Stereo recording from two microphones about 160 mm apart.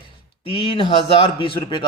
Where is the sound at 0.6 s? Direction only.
35° left (ahead or behind).